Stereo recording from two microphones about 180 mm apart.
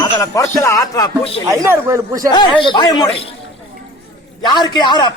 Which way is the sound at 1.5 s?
15° right (ahead or behind).